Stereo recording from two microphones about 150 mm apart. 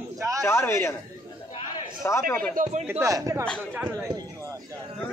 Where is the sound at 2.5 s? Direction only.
55° right (ahead or behind).